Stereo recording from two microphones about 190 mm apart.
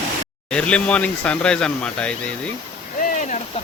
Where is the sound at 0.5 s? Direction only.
5° left (ahead or behind).